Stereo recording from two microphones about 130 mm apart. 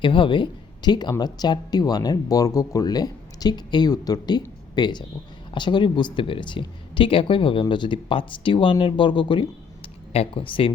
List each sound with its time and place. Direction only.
0.0 s speech: 40° left (ahead or behind)